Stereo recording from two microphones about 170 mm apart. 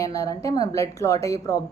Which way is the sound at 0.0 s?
20° left (ahead or behind).